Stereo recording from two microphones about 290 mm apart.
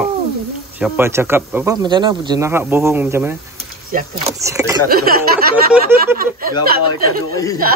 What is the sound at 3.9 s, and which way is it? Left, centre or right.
Speech, right.